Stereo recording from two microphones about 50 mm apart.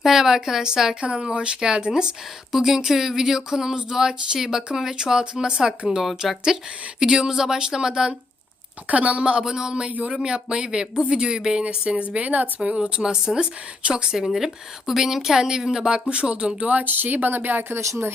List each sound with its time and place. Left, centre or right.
0.0 s speech: centre
1.0 s speech: right
8.9 s speech: right
9.9 s speech: right
10.2 s speech: centre; by 12.5 s right
13.0 s speech: centre
15.9 s speech: right
16.6 s speech: right